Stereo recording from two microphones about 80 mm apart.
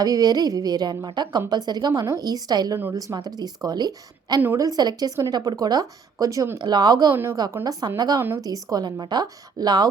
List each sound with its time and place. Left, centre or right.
0.0 s a woman's voice: right
4.5 s a woman's voice: right
6.7 s a woman's voice: right
7.1 s a woman's voice: right
7.6 s a woman's voice: right